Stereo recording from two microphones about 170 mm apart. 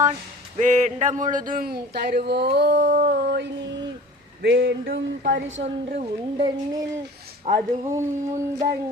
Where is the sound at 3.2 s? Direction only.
75° right (ahead or behind); by 5.6 s 90° right.